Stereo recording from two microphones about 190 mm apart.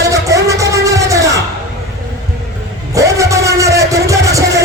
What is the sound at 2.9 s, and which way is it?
Music, 15° right (ahead or behind).